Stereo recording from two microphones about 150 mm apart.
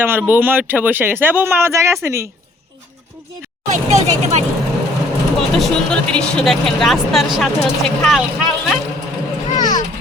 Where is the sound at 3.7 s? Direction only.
50° right (ahead or behind).